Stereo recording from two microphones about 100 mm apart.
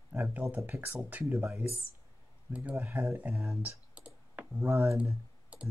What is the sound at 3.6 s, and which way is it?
Computer keyboard, 15° right (ahead or behind).